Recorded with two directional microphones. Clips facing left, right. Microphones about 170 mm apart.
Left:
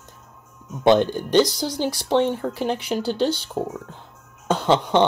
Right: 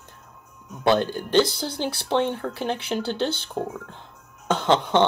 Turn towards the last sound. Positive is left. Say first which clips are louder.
# left 2 dB
turn(degrees=10)  # may be behind; listen again after turning